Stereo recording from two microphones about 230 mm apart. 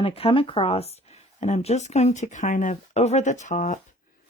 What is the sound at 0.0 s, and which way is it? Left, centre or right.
Speech, left.